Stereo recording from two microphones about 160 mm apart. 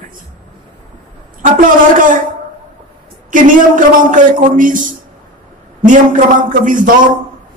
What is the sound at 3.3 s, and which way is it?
Speech, 55° right (ahead or behind).